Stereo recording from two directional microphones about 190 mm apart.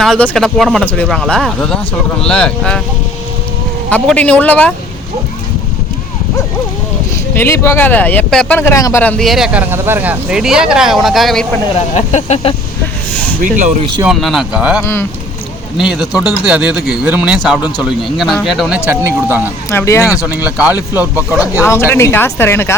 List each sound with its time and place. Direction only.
0.0 s speech: centre (ahead or behind)
3.8 s speech: 5° left (ahead or behind)
7.3 s speech: 15° left (ahead or behind)
11.9 s speech: 35° left (ahead or behind)
13.4 s speech: 40° right (ahead or behind)
14.0 s speech: centre (ahead or behind)
18.9 s speech: 10° right (ahead or behind)
19.4 s speech: 15° left (ahead or behind)
20.2 s speech: 10° right (ahead or behind)
21.6 s speech: 15° left (ahead or behind)